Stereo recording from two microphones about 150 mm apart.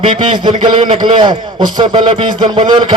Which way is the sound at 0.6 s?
35° right (ahead or behind).